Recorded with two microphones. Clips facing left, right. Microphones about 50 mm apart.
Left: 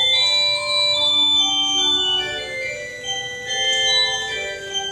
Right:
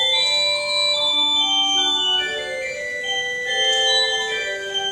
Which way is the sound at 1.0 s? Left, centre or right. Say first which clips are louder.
Left 1 dB; right.